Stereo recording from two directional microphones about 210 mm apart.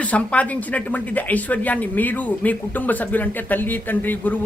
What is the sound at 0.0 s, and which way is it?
Speech, 5° left (ahead or behind).